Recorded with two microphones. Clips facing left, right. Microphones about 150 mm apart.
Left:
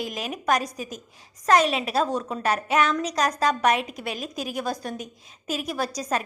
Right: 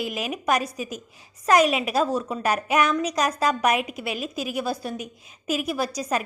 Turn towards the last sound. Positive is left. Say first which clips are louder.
# right 1 dB
turn(degrees=-10)  # may be behind; listen again after turning